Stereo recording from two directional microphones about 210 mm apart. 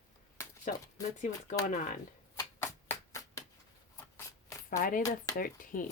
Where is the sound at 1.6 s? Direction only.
35° left (ahead or behind).